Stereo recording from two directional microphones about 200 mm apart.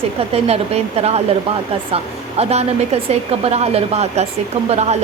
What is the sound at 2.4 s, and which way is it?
A woman's voice, 30° right (ahead or behind).